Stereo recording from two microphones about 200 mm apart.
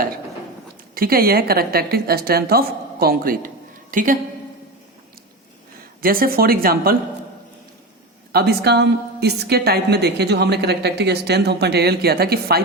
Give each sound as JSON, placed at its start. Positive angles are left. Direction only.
{"t": 0.9, "sound": "a woman's voice", "side_deg": -50}
{"t": 6.0, "sound": "a woman's voice", "side_deg": -45}
{"t": 8.3, "sound": "a woman's voice", "side_deg": -55}